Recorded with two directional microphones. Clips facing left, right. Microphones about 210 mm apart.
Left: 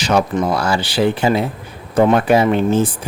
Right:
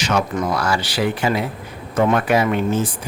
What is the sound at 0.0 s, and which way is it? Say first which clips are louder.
A man's voice: left 4 dB; 30° left (ahead or behind).